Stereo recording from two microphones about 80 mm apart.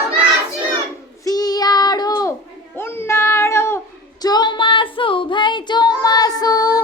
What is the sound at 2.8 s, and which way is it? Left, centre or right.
Child singing, left.